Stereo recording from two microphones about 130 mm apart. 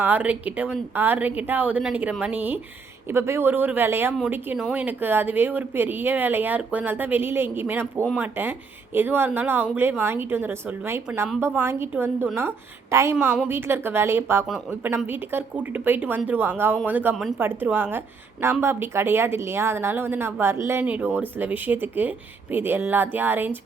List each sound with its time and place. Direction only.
0.0 s a woman's voice: 10° right (ahead or behind)
17.2 s speech: 5° right (ahead or behind)
17.4 s speech: 15° right (ahead or behind)